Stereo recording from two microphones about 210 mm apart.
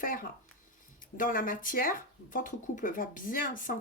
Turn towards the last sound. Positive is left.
turn(degrees=40)  # may be behind; listen again after turning